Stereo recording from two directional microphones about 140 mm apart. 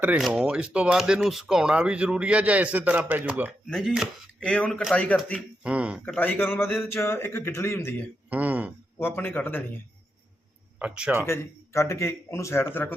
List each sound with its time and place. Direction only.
0.2 s speech: 5° right (ahead or behind)
3.7 s speech: centre (ahead or behind)
5.6 s speech: 10° right (ahead or behind)
6.1 s speech: 10° left (ahead or behind)
8.3 s speech: 10° right (ahead or behind)
9.0 s speech: 15° left (ahead or behind)
10.8 s speech: 10° right (ahead or behind)
11.3 s speech: 20° left (ahead or behind)